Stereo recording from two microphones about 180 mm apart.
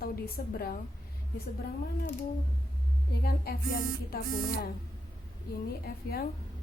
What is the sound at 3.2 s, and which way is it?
Speech, 55° left (ahead or behind).